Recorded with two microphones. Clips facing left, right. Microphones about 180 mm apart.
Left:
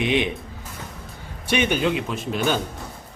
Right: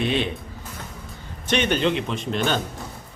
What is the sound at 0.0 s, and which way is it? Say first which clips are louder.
Speech: left 2 dB; 15° left (ahead or behind).